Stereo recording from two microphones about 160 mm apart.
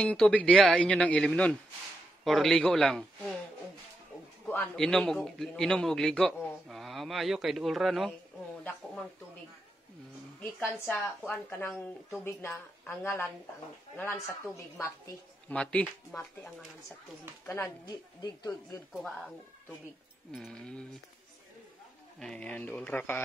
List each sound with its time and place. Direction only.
0.0 s a woman's voice: 5° left (ahead or behind)
4.5 s a man's voice: 5° left (ahead or behind)
10.4 s a woman's voice: 10° left (ahead or behind)
12.2 s a woman's voice: 15° left (ahead or behind)
15.4 s a woman's voice: 10° left (ahead or behind)
18.2 s a woman's voice: 20° left (ahead or behind)
18.9 s a man's voice: centre (ahead or behind)
22.2 s a woman's voice: 5° left (ahead or behind)